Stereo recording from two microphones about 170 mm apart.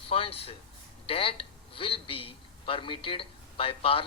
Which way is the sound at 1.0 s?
35° left (ahead or behind).